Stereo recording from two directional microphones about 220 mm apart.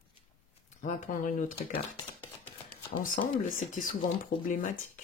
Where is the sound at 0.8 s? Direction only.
35° left (ahead or behind).